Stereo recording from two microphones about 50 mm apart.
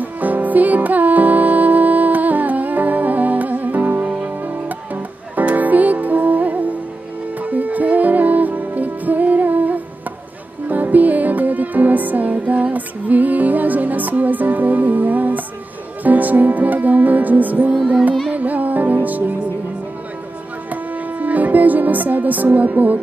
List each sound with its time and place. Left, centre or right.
0.0 s music: right
20.7 s music: right